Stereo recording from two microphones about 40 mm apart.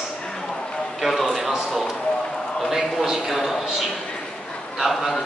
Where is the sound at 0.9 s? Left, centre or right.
Centre.